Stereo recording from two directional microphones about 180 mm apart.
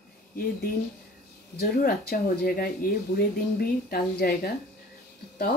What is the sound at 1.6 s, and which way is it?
Speech, 55° left (ahead or behind).